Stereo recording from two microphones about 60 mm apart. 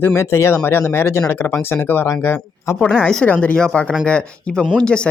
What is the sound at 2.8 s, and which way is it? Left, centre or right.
Speech, centre.